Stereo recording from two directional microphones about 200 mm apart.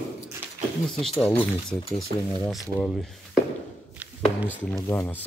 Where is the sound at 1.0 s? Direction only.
Centre (ahead or behind).